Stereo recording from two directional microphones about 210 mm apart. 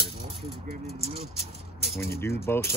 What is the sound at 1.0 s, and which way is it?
Speech, 30° right (ahead or behind).